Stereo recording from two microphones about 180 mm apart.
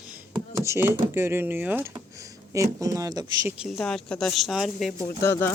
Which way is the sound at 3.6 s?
5° left (ahead or behind).